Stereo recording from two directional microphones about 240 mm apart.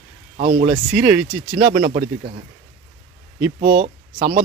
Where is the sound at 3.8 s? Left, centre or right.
Right.